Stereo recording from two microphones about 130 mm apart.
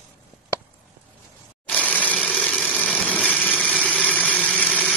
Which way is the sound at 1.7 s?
10° left (ahead or behind).